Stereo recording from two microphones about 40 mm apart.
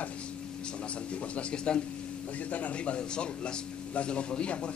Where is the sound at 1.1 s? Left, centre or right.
Left.